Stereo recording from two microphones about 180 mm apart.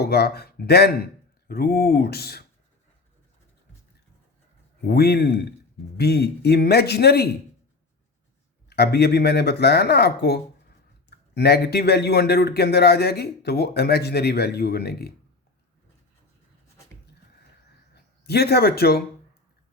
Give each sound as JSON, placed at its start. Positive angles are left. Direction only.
{"t": 0.0, "sound": "speech", "side_deg": 60}
{"t": 4.9, "sound": "speech", "side_deg": 60}
{"t": 8.7, "sound": "speech", "side_deg": 65}
{"t": 17.9, "sound": "speech", "side_deg": 65}